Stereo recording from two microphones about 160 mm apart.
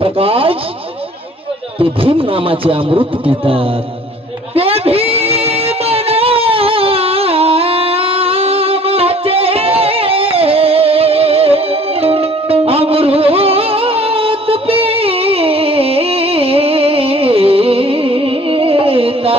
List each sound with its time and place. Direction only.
0.0 s speech: 35° right (ahead or behind)
1.8 s a man's voice: 35° right (ahead or behind)
4.6 s a sound: 35° right (ahead or behind)